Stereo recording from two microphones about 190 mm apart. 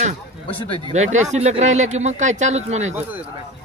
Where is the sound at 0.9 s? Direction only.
35° right (ahead or behind).